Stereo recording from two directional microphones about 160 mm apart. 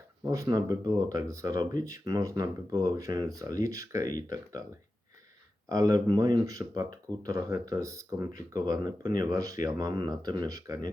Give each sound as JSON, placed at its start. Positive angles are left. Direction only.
{"t": 0.2, "sound": "speech", "side_deg": -20}
{"t": 5.6, "sound": "speech", "side_deg": -20}